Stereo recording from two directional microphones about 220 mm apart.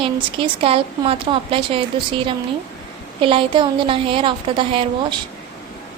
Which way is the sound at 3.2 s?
25° right (ahead or behind).